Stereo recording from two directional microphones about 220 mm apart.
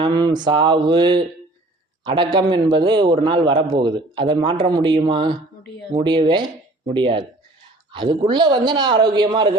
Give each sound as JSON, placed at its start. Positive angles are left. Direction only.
{"t": 0.0, "sound": "a man's voice", "side_deg": -20}